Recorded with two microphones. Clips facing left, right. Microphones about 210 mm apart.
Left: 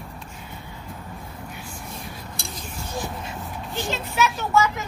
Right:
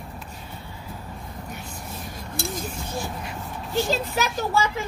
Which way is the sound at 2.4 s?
Centre (ahead or behind).